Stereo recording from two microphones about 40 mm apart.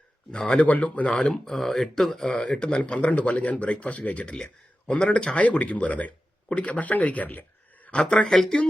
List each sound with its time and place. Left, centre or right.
0.3 s speech: left
0.7 s speech: left
1.2 s speech: centre
2.2 s a man's voice: centre; by 7.9 s left
8.3 s speech: centre